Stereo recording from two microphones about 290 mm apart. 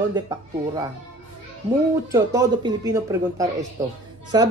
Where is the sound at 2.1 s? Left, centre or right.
Centre.